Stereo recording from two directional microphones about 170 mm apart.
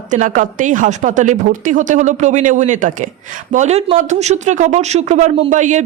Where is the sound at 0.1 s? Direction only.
50° right (ahead or behind).